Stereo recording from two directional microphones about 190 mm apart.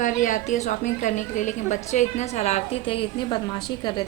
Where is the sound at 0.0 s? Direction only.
40° left (ahead or behind).